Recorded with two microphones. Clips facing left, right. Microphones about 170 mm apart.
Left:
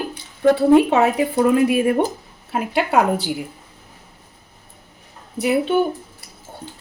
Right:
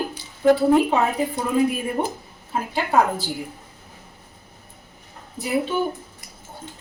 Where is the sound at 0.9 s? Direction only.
75° left (ahead or behind).